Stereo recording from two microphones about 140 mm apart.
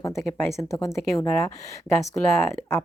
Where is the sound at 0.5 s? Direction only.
20° left (ahead or behind).